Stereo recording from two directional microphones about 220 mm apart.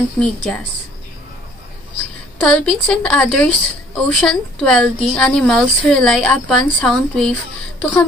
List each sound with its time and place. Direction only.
0.2 s a woman's voice: 5° left (ahead or behind)
2.4 s a woman's voice: 5° left (ahead or behind)